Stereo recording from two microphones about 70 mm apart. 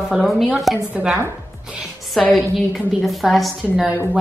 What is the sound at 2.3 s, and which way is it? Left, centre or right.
A woman's voice, centre.